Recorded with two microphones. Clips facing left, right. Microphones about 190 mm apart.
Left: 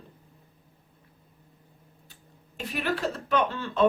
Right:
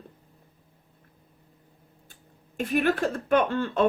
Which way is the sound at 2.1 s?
50° right (ahead or behind).